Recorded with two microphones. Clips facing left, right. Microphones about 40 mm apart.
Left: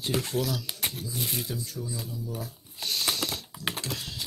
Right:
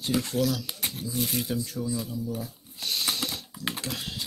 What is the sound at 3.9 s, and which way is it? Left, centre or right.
Typing, centre.